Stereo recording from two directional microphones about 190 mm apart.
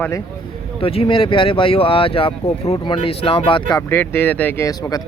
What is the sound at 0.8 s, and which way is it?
Speech, 30° left (ahead or behind).